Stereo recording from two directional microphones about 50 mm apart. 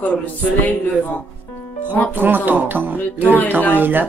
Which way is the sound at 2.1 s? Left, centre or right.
Right.